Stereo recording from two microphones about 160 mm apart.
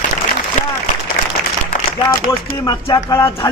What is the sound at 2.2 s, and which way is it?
A man's voice, 30° left (ahead or behind).